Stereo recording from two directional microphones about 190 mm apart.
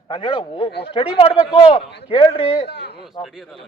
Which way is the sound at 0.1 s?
30° left (ahead or behind).